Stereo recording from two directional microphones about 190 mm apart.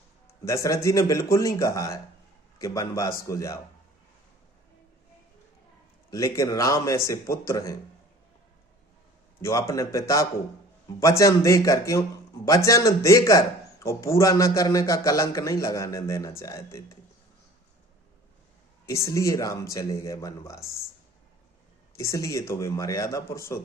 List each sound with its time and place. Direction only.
0.3 s speech: 15° left (ahead or behind)
6.1 s speech: 15° left (ahead or behind)
9.4 s speech: 15° left (ahead or behind)
18.9 s speech: 15° left (ahead or behind)
21.9 s speech: 15° left (ahead or behind)